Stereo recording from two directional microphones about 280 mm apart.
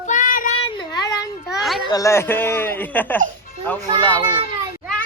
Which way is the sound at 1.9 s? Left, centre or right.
Centre.